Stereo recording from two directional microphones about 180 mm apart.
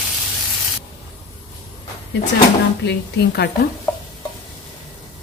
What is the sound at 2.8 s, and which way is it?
Speech, 70° left (ahead or behind).